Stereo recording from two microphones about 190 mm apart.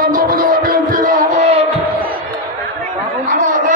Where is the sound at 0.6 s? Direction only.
45° right (ahead or behind).